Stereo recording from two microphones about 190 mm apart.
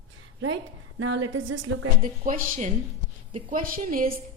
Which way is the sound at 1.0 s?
85° right.